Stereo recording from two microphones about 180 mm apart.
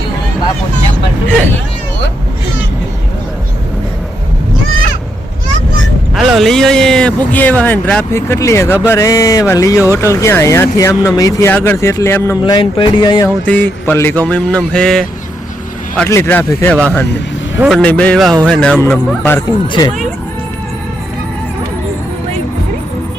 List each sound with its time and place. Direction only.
6.1 s speech: centre (ahead or behind); by 8.8 s 15° left (ahead or behind)
8.9 s a sound: 20° left (ahead or behind)
10.0 s speech: 15° left (ahead or behind)
13.4 s speech: 10° left (ahead or behind)
16.0 s speech: 15° left (ahead or behind)
19.6 s a sound: 25° left (ahead or behind)